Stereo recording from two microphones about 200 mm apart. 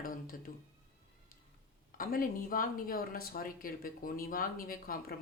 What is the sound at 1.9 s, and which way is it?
Speech, 45° left (ahead or behind).